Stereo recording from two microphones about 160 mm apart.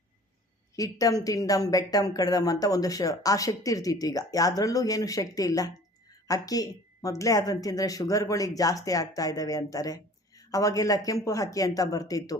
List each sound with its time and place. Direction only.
0.8 s a woman's voice: 20° left (ahead or behind)